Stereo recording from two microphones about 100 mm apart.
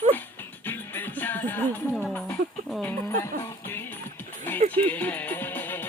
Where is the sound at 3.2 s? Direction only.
25° left (ahead or behind).